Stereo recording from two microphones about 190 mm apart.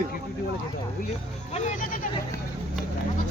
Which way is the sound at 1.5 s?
40° left (ahead or behind).